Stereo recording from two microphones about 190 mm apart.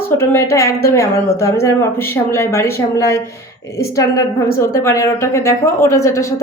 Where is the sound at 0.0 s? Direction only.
10° left (ahead or behind).